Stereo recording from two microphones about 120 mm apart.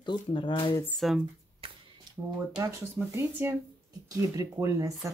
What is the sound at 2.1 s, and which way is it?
Speech, 30° right (ahead or behind).